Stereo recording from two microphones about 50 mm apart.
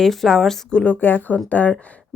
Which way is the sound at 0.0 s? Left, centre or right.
Centre.